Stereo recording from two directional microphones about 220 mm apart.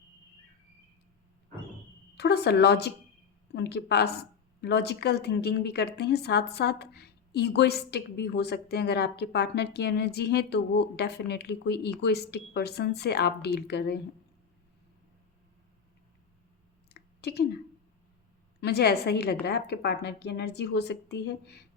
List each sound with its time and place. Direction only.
2.1 s a woman's voice: 50° left (ahead or behind)
16.9 s a sound: 45° left (ahead or behind)
18.6 s a woman's voice: 45° left (ahead or behind)